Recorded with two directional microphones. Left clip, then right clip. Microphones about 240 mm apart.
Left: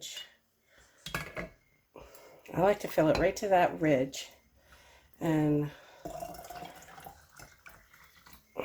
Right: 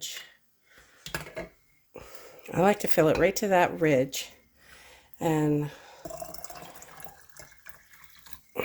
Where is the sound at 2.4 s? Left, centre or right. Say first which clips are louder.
Right 3 dB; right.